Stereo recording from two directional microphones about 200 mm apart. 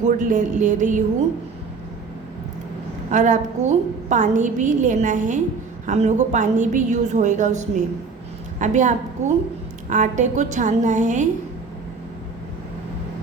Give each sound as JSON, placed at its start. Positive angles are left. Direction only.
{"t": 0.0, "sound": "a woman's voice", "side_deg": -40}
{"t": 3.1, "sound": "a woman's voice", "side_deg": -40}